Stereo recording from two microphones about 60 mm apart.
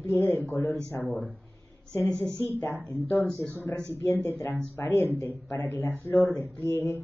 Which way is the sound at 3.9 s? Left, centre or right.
Left.